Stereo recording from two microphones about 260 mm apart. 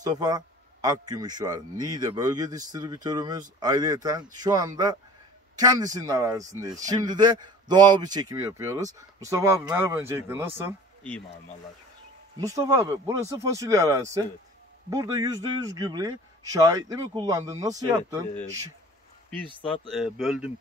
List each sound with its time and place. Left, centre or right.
0.0 s a man's voice: centre
12.4 s a man's voice: centre
19.9 s speech: centre